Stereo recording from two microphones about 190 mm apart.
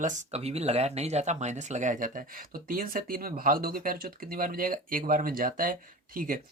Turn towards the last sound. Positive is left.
turn(degrees=-45)  # may be behind; listen again after turning